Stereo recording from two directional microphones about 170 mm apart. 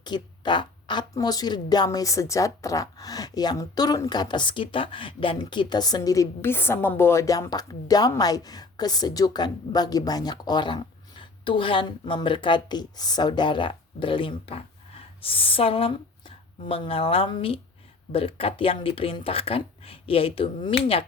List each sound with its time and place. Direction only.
0.0 s speech: 25° left (ahead or behind)